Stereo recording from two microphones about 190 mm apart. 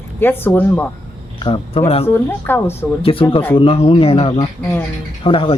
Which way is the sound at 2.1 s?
10° left (ahead or behind).